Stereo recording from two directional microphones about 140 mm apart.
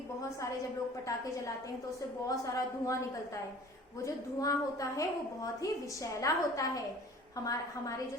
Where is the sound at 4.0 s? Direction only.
25° left (ahead or behind).